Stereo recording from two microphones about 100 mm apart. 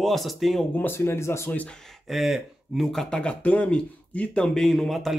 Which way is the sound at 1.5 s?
15° left (ahead or behind).